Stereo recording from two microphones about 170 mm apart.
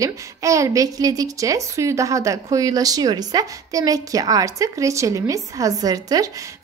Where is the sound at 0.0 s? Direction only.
20° right (ahead or behind).